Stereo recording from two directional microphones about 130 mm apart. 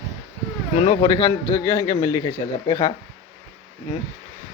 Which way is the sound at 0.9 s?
30° left (ahead or behind).